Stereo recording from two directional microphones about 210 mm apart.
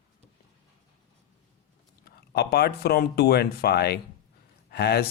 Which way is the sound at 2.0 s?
50° left (ahead or behind).